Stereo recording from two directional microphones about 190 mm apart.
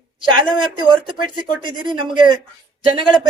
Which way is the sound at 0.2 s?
25° right (ahead or behind).